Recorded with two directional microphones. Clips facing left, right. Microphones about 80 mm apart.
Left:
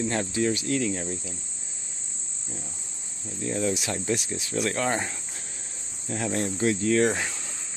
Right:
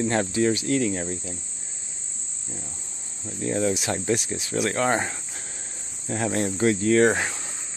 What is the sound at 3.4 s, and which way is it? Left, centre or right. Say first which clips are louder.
Cricket: right 3 dB; right.